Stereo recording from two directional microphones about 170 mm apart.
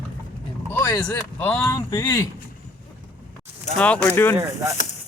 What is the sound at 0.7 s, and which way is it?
Speech, 15° left (ahead or behind).